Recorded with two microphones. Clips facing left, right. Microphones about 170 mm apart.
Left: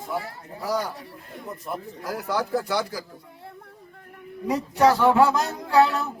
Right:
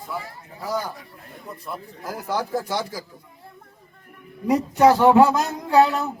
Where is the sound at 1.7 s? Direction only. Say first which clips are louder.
Left 2 dB; 20° left (ahead or behind).